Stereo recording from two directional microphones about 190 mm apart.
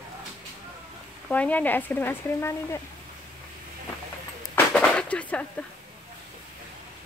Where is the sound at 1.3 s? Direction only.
10° left (ahead or behind).